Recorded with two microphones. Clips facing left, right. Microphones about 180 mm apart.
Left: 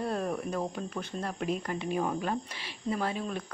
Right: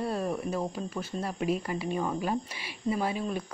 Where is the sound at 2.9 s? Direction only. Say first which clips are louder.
Right 2 dB; 10° right (ahead or behind).